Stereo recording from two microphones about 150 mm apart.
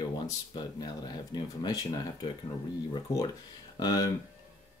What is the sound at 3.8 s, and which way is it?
Speech, 25° left (ahead or behind).